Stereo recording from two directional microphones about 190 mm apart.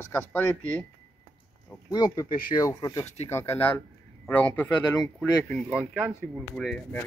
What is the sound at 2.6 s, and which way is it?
Speech, 20° left (ahead or behind).